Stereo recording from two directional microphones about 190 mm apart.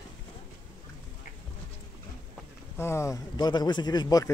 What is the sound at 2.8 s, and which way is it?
Speech, 15° left (ahead or behind).